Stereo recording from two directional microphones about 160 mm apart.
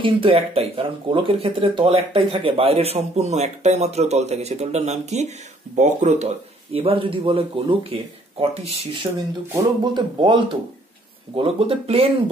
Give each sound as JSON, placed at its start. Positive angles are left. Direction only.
{"t": 0.0, "sound": "speech", "side_deg": -35}